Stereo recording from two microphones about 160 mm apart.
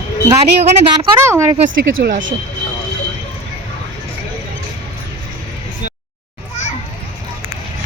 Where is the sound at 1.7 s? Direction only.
75° right (ahead or behind).